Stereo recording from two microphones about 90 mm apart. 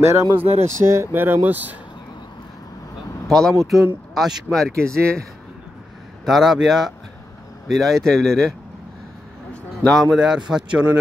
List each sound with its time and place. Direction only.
0.0 s speech: 30° right (ahead or behind)
3.3 s speech: 5° left (ahead or behind)
6.2 s speech: 5° right (ahead or behind)
10.0 s speech: 10° right (ahead or behind)